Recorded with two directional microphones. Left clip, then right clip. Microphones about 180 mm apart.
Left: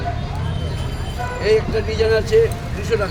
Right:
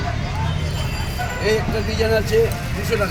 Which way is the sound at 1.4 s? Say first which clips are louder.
Left 4 dB; 15° left (ahead or behind).